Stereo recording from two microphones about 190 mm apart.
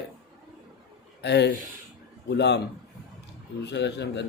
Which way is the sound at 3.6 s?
65° left (ahead or behind).